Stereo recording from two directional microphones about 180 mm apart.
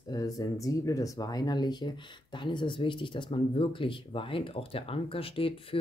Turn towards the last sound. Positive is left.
turn(degrees=30)  # may be behind; listen again after turning